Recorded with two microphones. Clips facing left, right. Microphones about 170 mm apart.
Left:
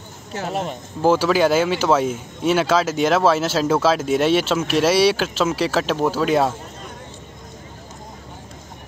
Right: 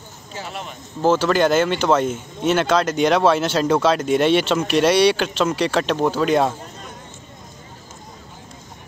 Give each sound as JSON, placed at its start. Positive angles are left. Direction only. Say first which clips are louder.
{"t": 0.5, "sound": "speech", "louder": "left 9 dB", "side_deg": 40}
{"t": 1.0, "sound": "speech", "louder": "even", "side_deg": 10}